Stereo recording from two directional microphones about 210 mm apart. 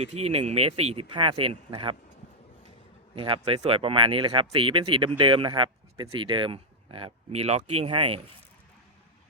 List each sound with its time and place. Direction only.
0.0 s speech: 30° right (ahead or behind)
3.2 s speech: 25° right (ahead or behind)